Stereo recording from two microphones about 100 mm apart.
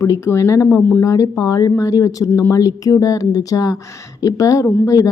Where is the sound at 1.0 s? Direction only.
35° left (ahead or behind).